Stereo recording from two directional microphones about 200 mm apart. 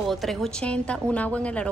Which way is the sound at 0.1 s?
Centre (ahead or behind).